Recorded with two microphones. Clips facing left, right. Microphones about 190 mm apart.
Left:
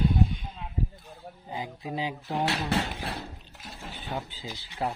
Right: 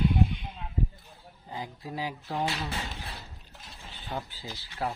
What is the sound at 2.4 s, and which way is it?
Speech, 70° left (ahead or behind).